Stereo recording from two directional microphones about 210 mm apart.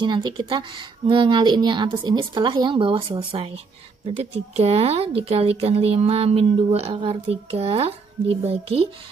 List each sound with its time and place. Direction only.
0.0 s speech: 20° right (ahead or behind)